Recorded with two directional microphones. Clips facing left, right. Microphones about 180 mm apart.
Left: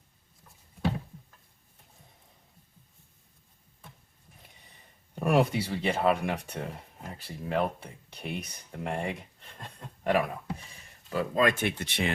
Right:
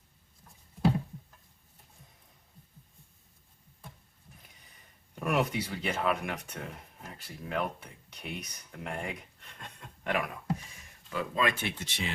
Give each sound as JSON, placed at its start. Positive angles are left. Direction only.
{"t": 5.2, "sound": "speech", "side_deg": 30}